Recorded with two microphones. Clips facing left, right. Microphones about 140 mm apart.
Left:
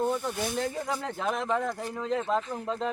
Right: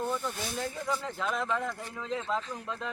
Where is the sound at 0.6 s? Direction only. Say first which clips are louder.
Left 2 dB; 55° left (ahead or behind).